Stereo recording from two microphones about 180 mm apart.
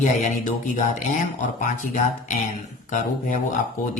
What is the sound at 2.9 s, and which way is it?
Speech, 45° left (ahead or behind).